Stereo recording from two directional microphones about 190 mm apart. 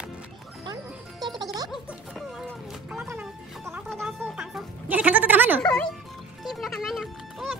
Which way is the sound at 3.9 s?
5° left (ahead or behind).